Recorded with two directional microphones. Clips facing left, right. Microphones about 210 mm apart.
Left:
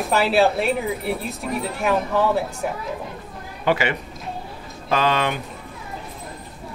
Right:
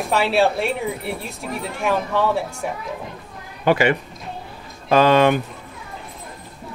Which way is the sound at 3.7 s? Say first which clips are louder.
Right 4 dB; 45° right (ahead or behind).